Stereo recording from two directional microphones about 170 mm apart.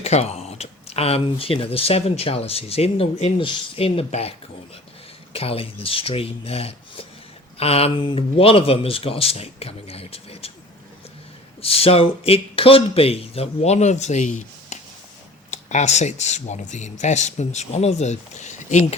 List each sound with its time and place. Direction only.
0.0 s speech: 40° left (ahead or behind)
11.6 s speech: 35° left (ahead or behind)